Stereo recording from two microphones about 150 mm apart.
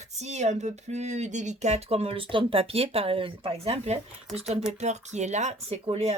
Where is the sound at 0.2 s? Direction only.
50° right (ahead or behind).